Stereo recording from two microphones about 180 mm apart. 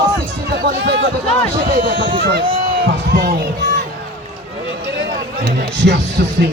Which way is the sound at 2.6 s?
55° right (ahead or behind).